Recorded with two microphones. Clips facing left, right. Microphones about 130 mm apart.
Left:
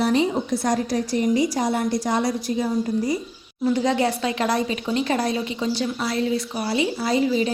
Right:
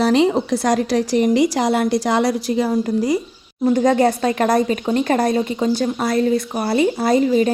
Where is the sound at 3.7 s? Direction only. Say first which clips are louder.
Right 6 dB; 45° right (ahead or behind).